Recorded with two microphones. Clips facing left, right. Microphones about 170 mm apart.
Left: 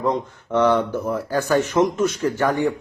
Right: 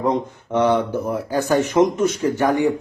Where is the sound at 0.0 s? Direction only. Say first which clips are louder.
Right 2 dB; 20° right (ahead or behind).